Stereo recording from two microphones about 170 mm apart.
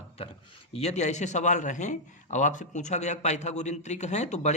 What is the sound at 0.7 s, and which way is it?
A man's voice, 40° left (ahead or behind).